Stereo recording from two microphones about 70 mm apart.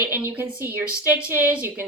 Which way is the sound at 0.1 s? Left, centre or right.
Right.